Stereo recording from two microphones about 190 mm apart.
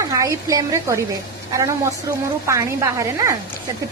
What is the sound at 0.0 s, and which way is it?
A woman's voice, 15° right (ahead or behind).